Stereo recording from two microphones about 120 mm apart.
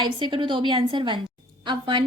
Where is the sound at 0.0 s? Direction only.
40° right (ahead or behind).